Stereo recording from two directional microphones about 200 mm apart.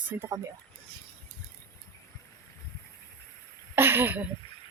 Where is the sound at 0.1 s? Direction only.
10° right (ahead or behind).